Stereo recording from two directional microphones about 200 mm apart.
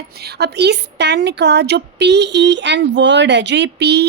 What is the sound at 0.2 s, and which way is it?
A woman's voice, 55° right (ahead or behind).